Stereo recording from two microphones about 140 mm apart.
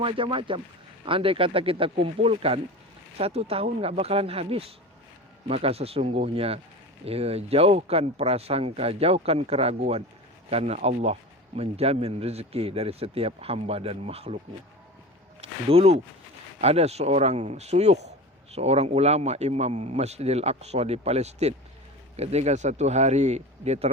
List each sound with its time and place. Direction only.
0.0 s speech: 40° right (ahead or behind)